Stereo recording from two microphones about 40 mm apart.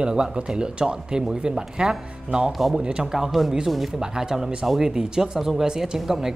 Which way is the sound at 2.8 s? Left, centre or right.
Right.